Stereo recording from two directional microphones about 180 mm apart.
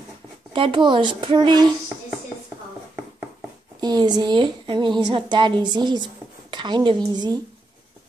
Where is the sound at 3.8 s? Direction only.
25° right (ahead or behind).